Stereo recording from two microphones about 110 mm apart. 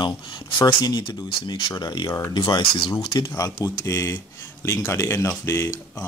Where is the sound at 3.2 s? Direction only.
30° left (ahead or behind).